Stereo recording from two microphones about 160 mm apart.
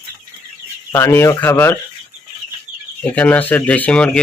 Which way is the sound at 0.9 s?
15° left (ahead or behind).